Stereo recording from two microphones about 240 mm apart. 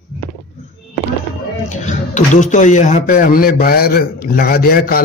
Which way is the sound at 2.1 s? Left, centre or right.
Left.